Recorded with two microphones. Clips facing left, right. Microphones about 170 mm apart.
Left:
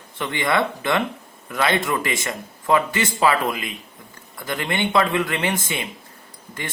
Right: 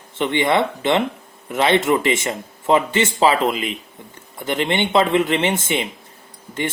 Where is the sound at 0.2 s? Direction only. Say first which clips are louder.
Right 4 dB; 25° right (ahead or behind).